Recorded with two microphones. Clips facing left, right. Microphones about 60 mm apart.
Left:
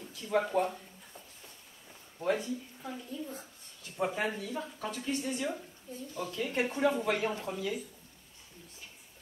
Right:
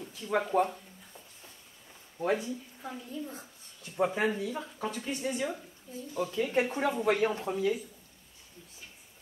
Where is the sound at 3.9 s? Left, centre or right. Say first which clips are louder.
Right 4 dB; centre.